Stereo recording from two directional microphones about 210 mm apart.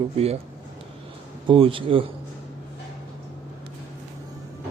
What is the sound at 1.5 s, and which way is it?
Speech, 25° right (ahead or behind).